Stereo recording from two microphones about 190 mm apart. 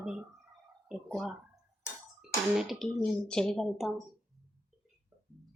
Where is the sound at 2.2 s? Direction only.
Centre (ahead or behind).